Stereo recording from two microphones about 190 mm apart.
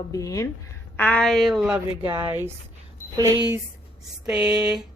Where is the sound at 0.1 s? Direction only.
15° left (ahead or behind); by 3.6 s 20° right (ahead or behind).